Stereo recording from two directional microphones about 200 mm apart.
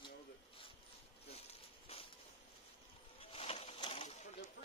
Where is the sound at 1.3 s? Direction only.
30° left (ahead or behind).